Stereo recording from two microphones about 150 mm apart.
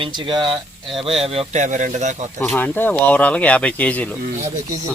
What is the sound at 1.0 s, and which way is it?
A man's voice, 40° right (ahead or behind).